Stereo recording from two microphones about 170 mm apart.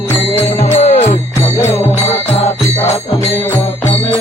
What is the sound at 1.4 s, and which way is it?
Music, 15° left (ahead or behind).